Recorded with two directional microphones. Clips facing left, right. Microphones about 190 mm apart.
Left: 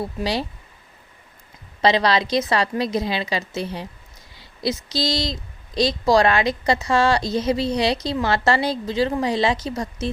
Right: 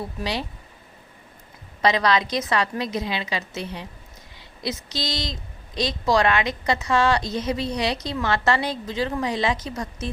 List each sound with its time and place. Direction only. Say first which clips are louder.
1.8 s a woman's voice: left 2 dB; 30° left (ahead or behind)